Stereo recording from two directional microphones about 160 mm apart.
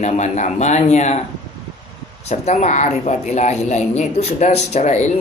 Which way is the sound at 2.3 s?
45° left (ahead or behind).